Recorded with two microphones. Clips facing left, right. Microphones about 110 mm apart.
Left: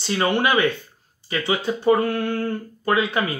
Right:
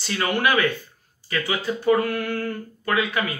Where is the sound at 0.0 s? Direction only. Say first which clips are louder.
Left 2 dB; 25° left (ahead or behind).